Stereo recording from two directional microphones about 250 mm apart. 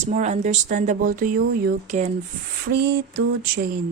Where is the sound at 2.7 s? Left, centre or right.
Right.